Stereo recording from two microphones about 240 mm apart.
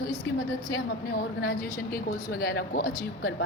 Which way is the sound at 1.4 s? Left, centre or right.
Left.